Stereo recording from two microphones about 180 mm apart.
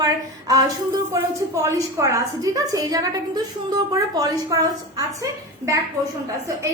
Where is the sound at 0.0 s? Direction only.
20° right (ahead or behind).